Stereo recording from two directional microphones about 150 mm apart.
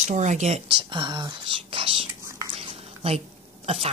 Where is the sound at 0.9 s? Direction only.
30° right (ahead or behind).